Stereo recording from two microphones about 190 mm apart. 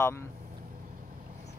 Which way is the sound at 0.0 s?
15° left (ahead or behind).